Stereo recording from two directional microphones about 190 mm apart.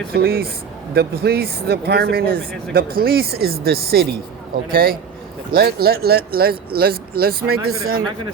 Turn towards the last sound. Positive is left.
turn(degrees=-50)  # may be behind; listen again after turning